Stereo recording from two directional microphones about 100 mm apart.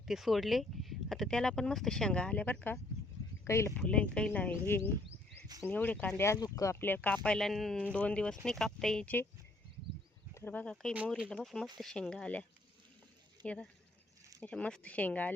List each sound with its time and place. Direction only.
0.0 s speech: 5° right (ahead or behind); by 2.7 s 15° left (ahead or behind)
3.4 s speech: 30° left (ahead or behind)
3.8 s speech: 15° left (ahead or behind); by 6.7 s 35° left (ahead or behind)
6.7 s speech: 20° left (ahead or behind)
10.3 s speech: 20° left (ahead or behind)